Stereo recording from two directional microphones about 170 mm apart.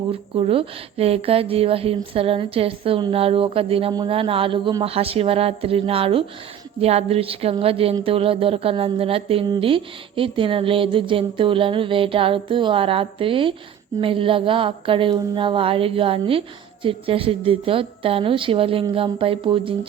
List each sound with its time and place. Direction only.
0.1 s a woman's voice: 35° right (ahead or behind)